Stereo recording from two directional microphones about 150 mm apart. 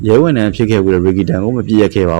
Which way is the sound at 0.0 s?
20° right (ahead or behind).